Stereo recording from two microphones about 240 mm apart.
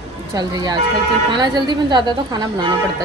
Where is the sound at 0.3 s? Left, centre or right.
Centre.